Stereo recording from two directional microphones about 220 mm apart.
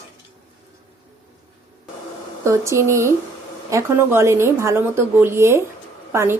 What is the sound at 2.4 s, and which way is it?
A woman's voice, 15° right (ahead or behind).